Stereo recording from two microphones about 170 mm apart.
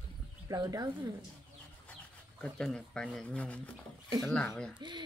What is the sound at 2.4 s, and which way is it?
Speech, 5° left (ahead or behind).